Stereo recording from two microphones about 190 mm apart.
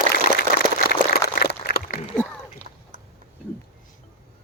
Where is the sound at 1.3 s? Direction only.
50° left (ahead or behind).